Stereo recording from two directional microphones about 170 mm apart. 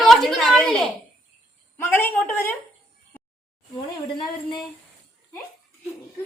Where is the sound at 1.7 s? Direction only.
15° left (ahead or behind).